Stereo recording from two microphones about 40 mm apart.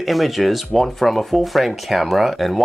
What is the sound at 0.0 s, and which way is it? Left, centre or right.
Speech, centre.